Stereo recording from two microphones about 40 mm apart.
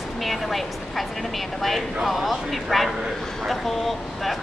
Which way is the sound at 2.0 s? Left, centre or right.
Centre.